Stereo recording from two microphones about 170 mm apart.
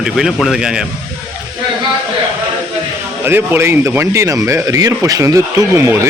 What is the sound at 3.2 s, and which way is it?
A man's voice, 15° right (ahead or behind).